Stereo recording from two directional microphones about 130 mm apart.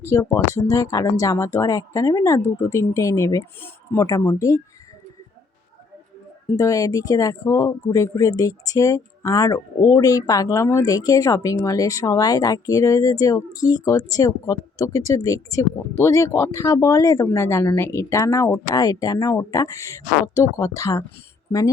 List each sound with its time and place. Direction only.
0.0 s speech: 20° left (ahead or behind)
6.5 s speech: 25° left (ahead or behind)